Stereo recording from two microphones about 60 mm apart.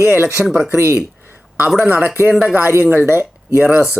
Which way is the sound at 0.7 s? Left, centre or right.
Right.